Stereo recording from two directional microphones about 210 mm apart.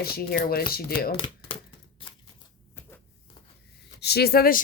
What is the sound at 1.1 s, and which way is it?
Typewriter, 25° left (ahead or behind).